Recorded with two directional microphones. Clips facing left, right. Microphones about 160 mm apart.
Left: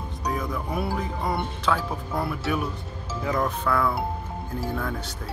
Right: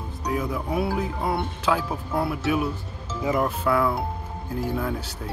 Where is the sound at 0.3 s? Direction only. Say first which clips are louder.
Right 3 dB; 5° right (ahead or behind).